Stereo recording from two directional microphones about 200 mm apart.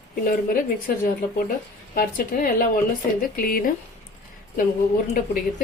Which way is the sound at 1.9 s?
45° left (ahead or behind).